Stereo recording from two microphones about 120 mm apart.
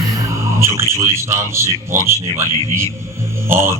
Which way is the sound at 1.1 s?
25° right (ahead or behind).